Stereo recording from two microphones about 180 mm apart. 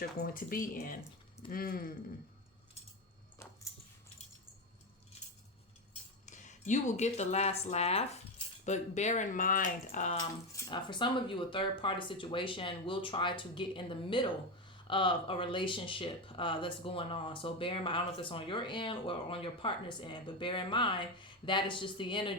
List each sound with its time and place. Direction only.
0.2 s speech: 50° left (ahead or behind)
3.3 s keys jangling: 15° left (ahead or behind)
6.2 s speech: 40° left (ahead or behind)
10.2 s speech: 25° left (ahead or behind)